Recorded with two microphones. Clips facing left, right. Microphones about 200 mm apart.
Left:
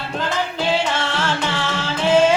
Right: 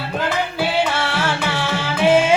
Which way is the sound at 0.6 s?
10° right (ahead or behind).